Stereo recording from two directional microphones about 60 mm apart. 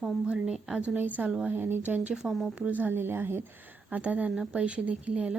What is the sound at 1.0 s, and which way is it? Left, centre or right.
A woman's voice, right.